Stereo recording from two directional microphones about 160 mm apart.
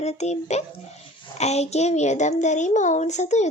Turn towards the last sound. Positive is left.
turn(degrees=45)  # may be behind; listen again after turning